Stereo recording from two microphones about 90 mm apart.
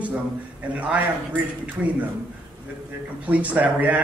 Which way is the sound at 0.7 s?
15° right (ahead or behind).